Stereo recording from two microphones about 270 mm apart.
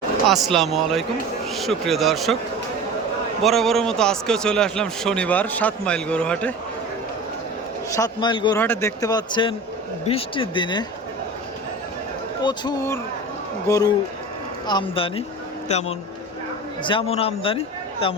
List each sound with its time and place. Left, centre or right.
0.4 s a man's voice: centre
3.4 s a man's voice: centre
7.9 s speech: centre
12.4 s speech: centre